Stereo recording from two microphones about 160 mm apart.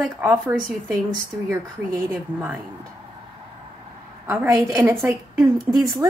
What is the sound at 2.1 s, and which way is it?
Speech, 10° right (ahead or behind).